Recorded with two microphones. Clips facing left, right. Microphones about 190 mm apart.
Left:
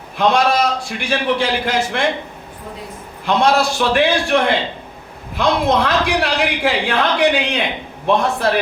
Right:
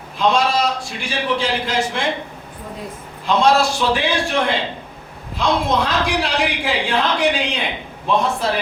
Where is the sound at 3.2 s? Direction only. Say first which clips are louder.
Even; 60° left (ahead or behind).